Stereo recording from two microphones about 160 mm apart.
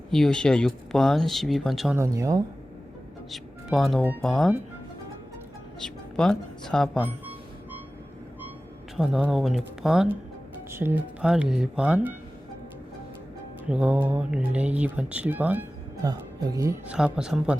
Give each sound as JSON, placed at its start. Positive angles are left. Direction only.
{"t": 0.1, "sound": "speech", "side_deg": 5}
{"t": 2.0, "sound": "speech", "side_deg": -20}
{"t": 3.3, "sound": "speech", "side_deg": 0}
{"t": 5.8, "sound": "a woman's voice", "side_deg": 5}
{"t": 9.0, "sound": "speech", "side_deg": 0}
{"t": 10.7, "sound": "speech", "side_deg": -15}
{"t": 13.7, "sound": "speech", "side_deg": -10}
{"t": 16.0, "sound": "speech", "side_deg": -25}
{"t": 16.8, "sound": "speech", "side_deg": -5}